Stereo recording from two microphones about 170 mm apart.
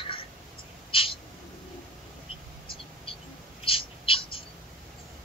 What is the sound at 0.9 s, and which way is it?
Owl, 35° left (ahead or behind).